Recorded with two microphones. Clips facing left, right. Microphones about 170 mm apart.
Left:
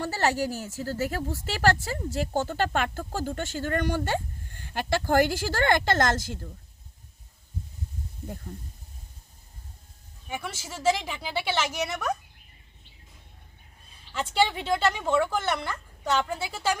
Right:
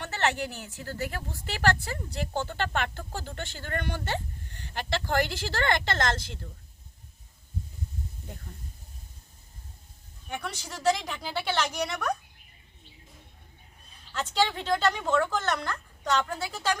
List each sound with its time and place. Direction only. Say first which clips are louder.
0.0 s a woman's voice: left 3 dB; 35° left (ahead or behind)
10.2 s speech: left 1 dB; 5° left (ahead or behind)
14.1 s a woman's voice: left 2 dB; 10° left (ahead or behind)